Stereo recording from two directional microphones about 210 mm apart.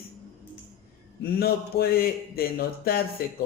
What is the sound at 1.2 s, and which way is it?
A man's voice, 50° left (ahead or behind).